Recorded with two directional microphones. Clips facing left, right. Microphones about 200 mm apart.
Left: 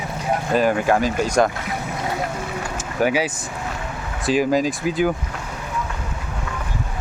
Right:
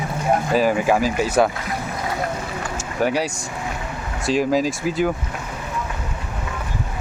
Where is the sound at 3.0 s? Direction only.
Centre (ahead or behind).